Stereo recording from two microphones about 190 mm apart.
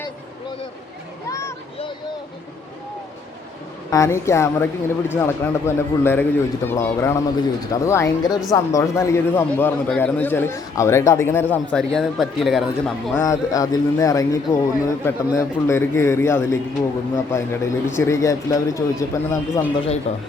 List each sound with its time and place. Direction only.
1.3 s a sound: 15° left (ahead or behind)
3.9 s a man's voice: 15° left (ahead or behind)
13.2 s a man's voice: 20° left (ahead or behind)
20.1 s speech: 35° left (ahead or behind)